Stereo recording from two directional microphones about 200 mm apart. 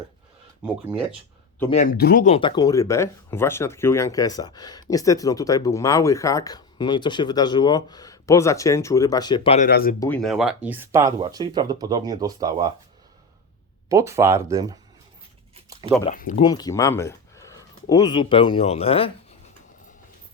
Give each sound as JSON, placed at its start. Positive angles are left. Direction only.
{"t": 0.6, "sound": "speech", "side_deg": -5}
{"t": 1.7, "sound": "speech", "side_deg": 45}
{"t": 2.2, "sound": "speech", "side_deg": 30}
{"t": 9.6, "sound": "speech", "side_deg": 50}
{"t": 10.2, "sound": "speech", "side_deg": 0}
{"t": 13.9, "sound": "speech", "side_deg": -15}
{"t": 16.0, "sound": "speech", "side_deg": 40}
{"t": 16.4, "sound": "speech", "side_deg": 20}